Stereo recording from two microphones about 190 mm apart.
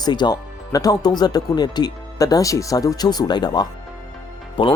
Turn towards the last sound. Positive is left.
turn(degrees=25)  # may be behind; listen again after turning